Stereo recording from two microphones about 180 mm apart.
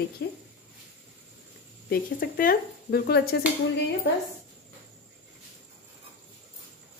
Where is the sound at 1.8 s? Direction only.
55° left (ahead or behind).